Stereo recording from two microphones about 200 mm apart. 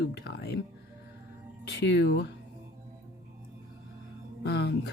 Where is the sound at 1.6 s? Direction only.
60° left (ahead or behind).